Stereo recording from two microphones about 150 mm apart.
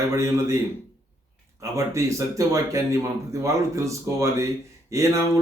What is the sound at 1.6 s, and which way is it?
Speech, 20° right (ahead or behind).